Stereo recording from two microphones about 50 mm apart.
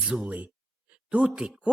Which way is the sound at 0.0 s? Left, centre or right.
Right.